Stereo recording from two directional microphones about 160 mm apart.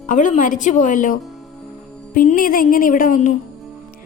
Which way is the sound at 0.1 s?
50° left (ahead or behind).